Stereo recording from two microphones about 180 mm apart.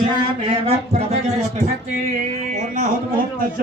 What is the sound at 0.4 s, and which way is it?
A man's voice, 30° right (ahead or behind).